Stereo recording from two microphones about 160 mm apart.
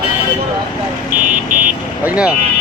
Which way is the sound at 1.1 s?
55° right (ahead or behind).